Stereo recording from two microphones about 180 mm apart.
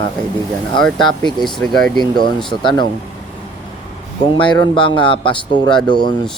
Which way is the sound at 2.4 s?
25° left (ahead or behind).